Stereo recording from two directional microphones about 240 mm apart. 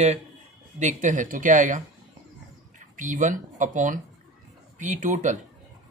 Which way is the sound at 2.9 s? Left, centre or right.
Right.